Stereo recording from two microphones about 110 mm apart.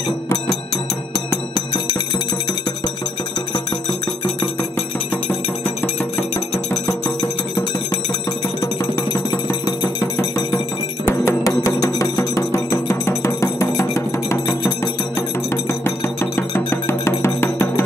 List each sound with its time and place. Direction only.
8.5 s music: 35° left (ahead or behind)
11.1 s music: 25° left (ahead or behind)